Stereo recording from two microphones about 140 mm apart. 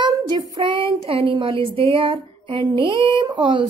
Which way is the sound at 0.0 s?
30° right (ahead or behind).